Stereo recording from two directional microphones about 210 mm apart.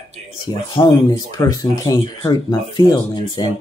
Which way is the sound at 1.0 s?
15° left (ahead or behind).